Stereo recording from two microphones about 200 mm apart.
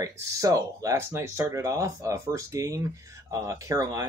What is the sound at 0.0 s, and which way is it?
Speech, 15° right (ahead or behind).